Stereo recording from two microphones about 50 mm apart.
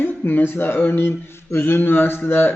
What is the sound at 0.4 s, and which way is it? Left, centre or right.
Speech, left.